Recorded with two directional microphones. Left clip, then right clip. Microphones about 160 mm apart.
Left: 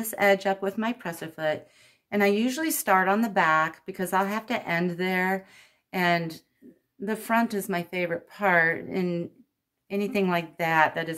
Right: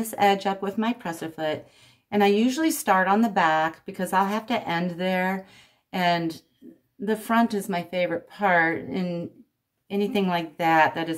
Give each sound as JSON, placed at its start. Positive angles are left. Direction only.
{"t": 0.0, "sound": "a woman's voice", "side_deg": 30}